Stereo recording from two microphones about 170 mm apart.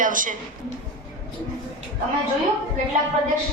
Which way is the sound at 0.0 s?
50° right (ahead or behind).